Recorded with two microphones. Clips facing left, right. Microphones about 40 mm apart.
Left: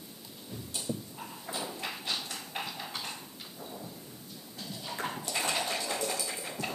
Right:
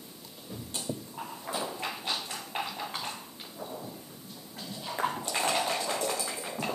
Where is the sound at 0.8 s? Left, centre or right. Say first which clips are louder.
Right 1 dB; centre.